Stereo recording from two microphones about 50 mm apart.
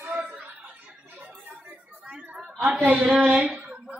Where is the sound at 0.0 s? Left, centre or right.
Right.